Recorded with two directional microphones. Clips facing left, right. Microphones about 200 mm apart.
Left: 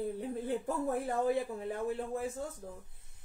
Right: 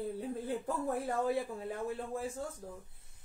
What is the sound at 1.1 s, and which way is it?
A woman's voice, 20° left (ahead or behind).